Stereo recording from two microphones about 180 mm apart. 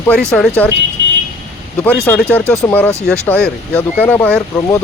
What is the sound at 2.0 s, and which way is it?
Speech, 10° left (ahead or behind).